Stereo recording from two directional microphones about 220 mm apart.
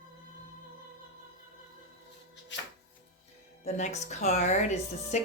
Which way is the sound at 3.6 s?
30° left (ahead or behind).